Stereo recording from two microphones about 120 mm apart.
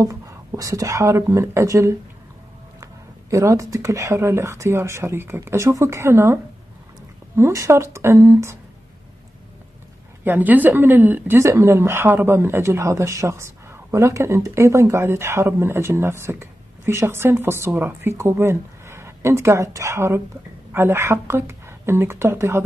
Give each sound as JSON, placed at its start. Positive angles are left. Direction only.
{"t": 0.0, "sound": "a woman's voice", "side_deg": -25}
{"t": 10.2, "sound": "a woman's voice", "side_deg": -15}